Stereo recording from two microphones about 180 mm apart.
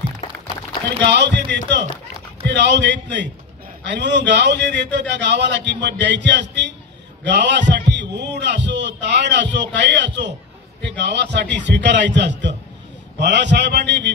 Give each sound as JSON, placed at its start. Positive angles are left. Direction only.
{"t": 1.0, "sound": "a man's voice", "side_deg": -75}